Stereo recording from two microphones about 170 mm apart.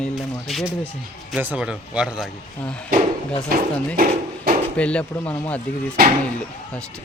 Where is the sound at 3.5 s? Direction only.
60° right (ahead or behind).